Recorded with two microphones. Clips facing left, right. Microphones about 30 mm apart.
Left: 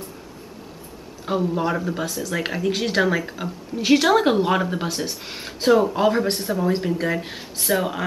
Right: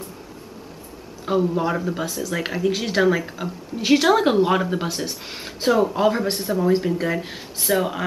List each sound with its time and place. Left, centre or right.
1.2 s speech: centre